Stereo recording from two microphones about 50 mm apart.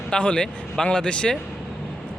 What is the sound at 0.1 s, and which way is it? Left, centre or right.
A man's voice, left.